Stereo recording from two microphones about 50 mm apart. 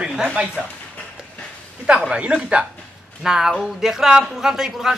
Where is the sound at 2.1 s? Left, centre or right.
Right.